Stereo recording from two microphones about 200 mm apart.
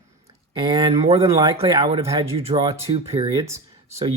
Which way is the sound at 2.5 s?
25° right (ahead or behind).